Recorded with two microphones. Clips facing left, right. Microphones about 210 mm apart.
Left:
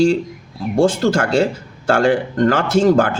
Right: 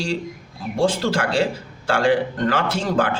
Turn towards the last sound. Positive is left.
turn(degrees=45)  # may be behind; listen again after turning